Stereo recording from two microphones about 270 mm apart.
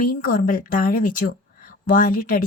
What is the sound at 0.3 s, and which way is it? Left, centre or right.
Speech, left.